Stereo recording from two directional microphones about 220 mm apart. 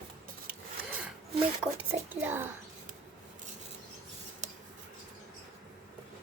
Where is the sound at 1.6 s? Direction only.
10° right (ahead or behind).